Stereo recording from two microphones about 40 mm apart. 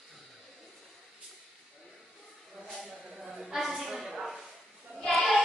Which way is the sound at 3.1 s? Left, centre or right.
Centre.